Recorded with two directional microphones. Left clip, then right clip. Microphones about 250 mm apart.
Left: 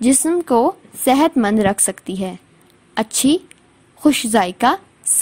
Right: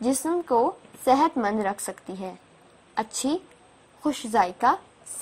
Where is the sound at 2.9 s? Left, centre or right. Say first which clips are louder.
Left 10 dB; left.